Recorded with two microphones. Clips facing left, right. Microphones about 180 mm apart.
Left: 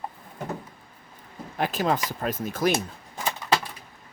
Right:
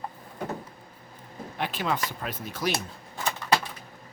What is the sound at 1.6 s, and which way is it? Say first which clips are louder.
Speech: left 4 dB; 45° left (ahead or behind).